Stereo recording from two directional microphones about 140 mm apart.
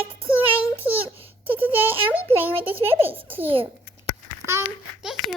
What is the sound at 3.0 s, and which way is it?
Speech, 15° right (ahead or behind).